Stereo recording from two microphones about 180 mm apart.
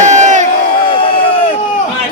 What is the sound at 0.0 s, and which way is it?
Crowd, 40° right (ahead or behind).